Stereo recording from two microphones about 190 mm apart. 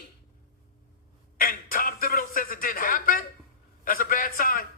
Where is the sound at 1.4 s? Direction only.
50° left (ahead or behind).